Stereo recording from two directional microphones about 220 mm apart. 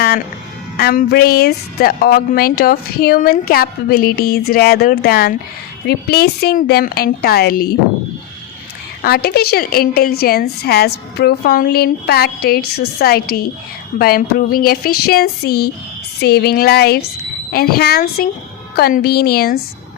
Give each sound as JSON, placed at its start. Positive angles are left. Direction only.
{"t": 0.8, "sound": "speech", "side_deg": 45}
{"t": 9.0, "sound": "speech", "side_deg": 45}